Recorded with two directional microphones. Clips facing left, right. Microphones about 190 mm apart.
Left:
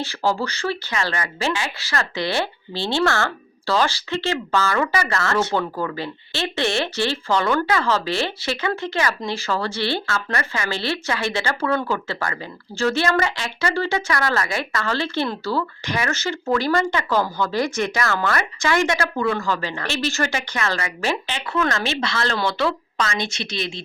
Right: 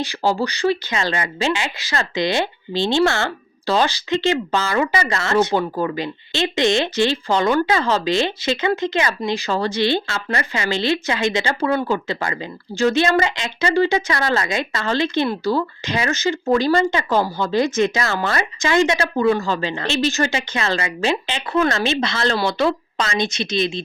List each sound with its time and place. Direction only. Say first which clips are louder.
0.0 s speech: right 2 dB; 15° right (ahead or behind)
21.5 s speech: right 4 dB; 35° right (ahead or behind)
21.8 s speech: right 4 dB; 20° right (ahead or behind)